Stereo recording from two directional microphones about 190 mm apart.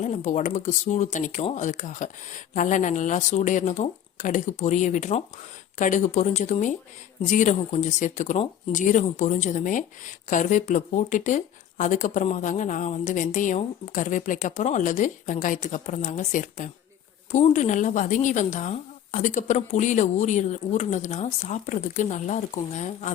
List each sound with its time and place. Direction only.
0.0 s speech: 40° left (ahead or behind)